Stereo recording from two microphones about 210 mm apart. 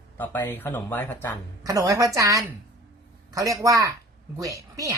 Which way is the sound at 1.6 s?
15° right (ahead or behind).